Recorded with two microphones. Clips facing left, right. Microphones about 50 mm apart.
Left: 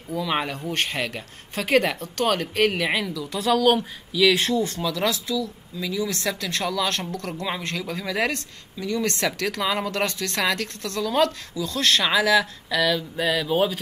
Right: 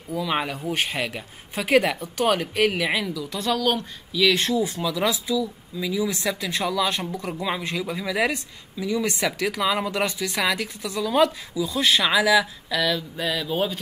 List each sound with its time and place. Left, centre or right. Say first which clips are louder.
0.1 s speech: even; centre